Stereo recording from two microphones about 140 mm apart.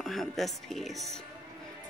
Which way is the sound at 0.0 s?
Centre (ahead or behind).